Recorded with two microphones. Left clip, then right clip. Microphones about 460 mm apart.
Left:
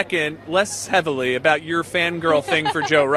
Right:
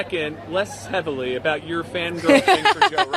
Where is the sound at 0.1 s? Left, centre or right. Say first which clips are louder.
Left 4 dB; left.